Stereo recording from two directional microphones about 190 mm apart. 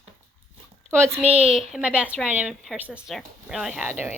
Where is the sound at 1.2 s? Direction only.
5° right (ahead or behind).